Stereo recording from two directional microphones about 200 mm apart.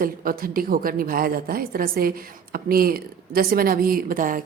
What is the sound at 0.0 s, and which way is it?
A woman's voice, 45° right (ahead or behind).